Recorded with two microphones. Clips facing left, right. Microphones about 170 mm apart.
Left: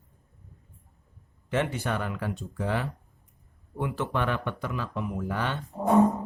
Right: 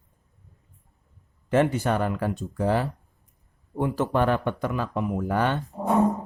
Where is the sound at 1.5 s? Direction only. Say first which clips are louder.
Right 6 dB; 40° right (ahead or behind).